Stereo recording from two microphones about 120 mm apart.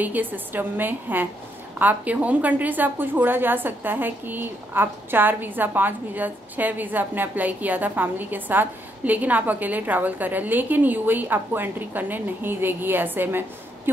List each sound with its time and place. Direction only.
0.0 s a woman's voice: 15° right (ahead or behind)